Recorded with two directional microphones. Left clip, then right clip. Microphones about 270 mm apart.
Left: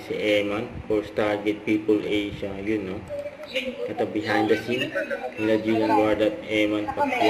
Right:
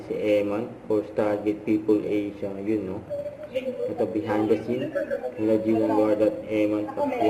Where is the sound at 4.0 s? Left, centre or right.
Centre.